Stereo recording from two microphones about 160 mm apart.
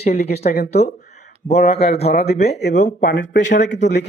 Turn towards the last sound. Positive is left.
turn(degrees=90)